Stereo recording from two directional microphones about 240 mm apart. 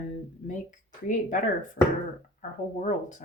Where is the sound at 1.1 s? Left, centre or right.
Left.